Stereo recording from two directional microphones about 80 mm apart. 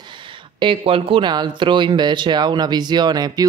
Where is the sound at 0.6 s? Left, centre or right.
Right.